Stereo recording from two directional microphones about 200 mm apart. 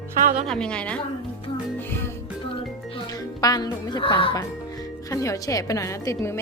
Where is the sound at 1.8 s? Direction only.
10° left (ahead or behind).